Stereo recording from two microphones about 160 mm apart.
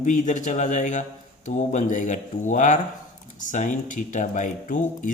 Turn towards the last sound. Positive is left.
turn(degrees=55)  # may be behind; listen again after turning